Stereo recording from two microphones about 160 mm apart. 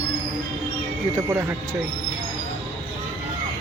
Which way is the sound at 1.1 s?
15° right (ahead or behind).